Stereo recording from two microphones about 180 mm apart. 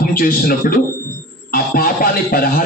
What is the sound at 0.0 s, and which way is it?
A man's voice, 50° left (ahead or behind).